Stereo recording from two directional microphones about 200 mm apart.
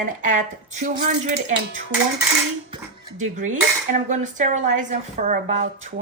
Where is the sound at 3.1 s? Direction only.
40° right (ahead or behind).